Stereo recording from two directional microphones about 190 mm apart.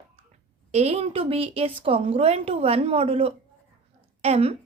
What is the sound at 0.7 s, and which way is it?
A woman's voice, 35° right (ahead or behind).